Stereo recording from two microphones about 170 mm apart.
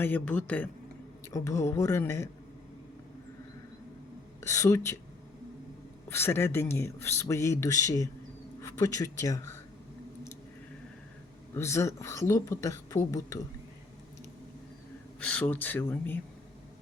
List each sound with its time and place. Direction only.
0.0 s speech: 10° left (ahead or behind)
4.4 s speech: 15° left (ahead or behind)
6.1 s speech: 15° left (ahead or behind)
11.5 s speech: 15° left (ahead or behind)
15.2 s speech: 10° left (ahead or behind)